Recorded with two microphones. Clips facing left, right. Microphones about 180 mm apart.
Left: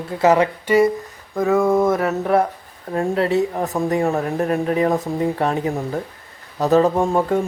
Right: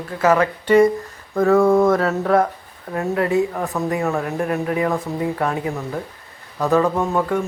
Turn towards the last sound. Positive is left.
turn(degrees=30)  # may be behind; listen again after turning